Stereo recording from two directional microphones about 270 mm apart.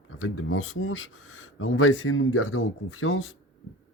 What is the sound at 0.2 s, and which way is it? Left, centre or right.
Speech, left.